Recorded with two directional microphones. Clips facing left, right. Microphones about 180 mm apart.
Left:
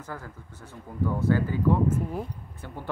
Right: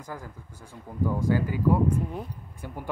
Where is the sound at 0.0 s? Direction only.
15° right (ahead or behind).